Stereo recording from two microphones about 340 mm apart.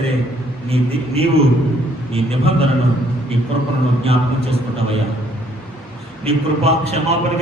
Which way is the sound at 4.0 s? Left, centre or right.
Centre.